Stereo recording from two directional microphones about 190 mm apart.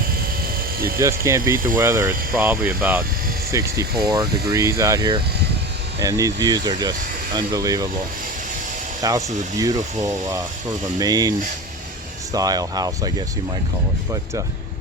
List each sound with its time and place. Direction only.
0.9 s speech: 15° right (ahead or behind)
9.0 s speech: 20° right (ahead or behind)